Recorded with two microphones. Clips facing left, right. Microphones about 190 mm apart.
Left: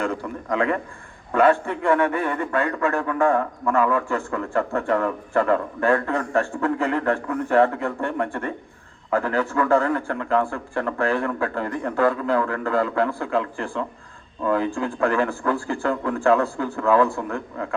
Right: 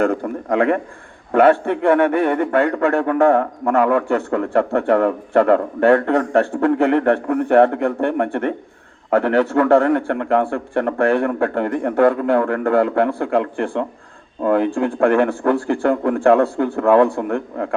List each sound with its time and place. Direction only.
0.0 s a man's voice: 55° right (ahead or behind)